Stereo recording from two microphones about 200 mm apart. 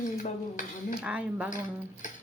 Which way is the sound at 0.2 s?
40° left (ahead or behind).